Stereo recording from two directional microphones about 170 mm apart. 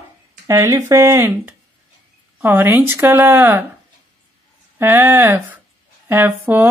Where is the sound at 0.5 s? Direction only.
20° right (ahead or behind).